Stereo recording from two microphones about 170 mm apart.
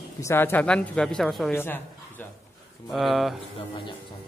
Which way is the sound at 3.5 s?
30° left (ahead or behind).